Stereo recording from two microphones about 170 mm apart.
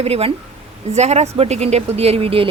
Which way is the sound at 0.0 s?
35° right (ahead or behind).